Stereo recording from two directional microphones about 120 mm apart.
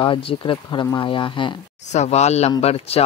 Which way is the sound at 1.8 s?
75° left (ahead or behind).